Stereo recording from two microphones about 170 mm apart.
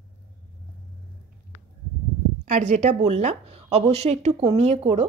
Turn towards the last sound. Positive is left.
turn(degrees=-35)  # may be behind; listen again after turning